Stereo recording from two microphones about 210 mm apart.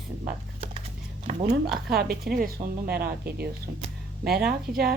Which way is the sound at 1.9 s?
45° right (ahead or behind).